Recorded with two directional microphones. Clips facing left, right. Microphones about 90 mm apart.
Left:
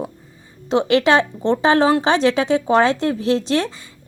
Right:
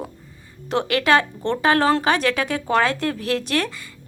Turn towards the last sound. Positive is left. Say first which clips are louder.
# left 4 dB
turn(degrees=25)  # may be behind; listen again after turning